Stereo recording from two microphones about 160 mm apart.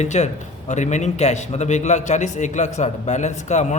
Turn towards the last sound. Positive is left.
turn(degrees=45)  # may be behind; listen again after turning